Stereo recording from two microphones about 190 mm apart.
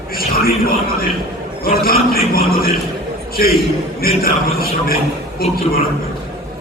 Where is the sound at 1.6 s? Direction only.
50° left (ahead or behind).